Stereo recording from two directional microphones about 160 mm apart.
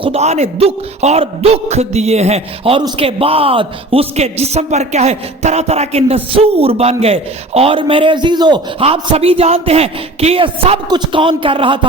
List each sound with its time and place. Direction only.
0.0 s a man's voice: 40° right (ahead or behind)